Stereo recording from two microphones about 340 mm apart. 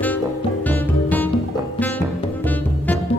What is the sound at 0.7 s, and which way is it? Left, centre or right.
Music, centre.